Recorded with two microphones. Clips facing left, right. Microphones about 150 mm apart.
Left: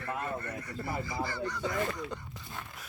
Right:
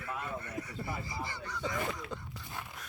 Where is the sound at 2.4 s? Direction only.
15° right (ahead or behind).